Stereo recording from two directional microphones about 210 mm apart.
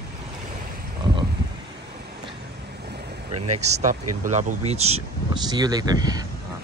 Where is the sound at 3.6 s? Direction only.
35° right (ahead or behind); by 6.2 s 20° right (ahead or behind).